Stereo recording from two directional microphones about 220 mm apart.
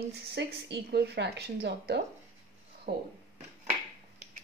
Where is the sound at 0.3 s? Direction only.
50° right (ahead or behind).